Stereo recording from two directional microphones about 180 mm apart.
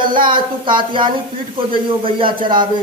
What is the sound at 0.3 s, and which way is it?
A man's voice, 25° right (ahead or behind).